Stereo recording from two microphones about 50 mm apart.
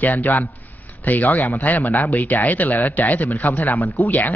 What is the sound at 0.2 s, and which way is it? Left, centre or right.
A man's voice, left.